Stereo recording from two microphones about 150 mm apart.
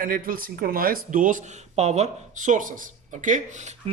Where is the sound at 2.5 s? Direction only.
60° right (ahead or behind).